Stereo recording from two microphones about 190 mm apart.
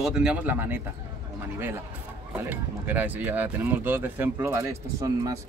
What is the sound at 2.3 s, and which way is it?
Speech, 10° right (ahead or behind).